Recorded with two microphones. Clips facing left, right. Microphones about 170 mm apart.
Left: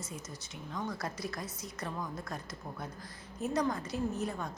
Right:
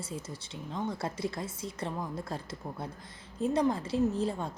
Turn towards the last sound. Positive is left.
turn(degrees=-30)  # may be behind; listen again after turning